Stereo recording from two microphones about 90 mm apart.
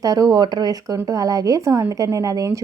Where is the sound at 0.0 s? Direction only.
40° right (ahead or behind).